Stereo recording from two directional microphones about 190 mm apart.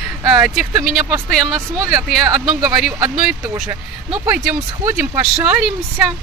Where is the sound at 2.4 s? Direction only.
Centre (ahead or behind).